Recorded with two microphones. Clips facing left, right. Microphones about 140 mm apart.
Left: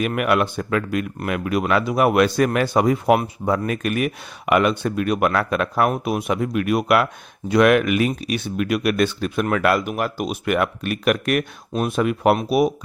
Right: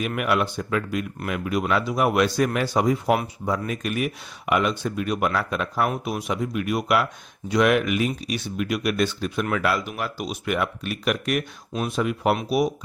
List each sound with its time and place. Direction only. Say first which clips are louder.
0.2 s speech: left 2 dB; 60° left (ahead or behind)
11.7 s speech: left 4 dB; 50° left (ahead or behind)